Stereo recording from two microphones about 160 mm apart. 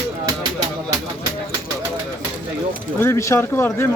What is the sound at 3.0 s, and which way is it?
Speech, 15° left (ahead or behind).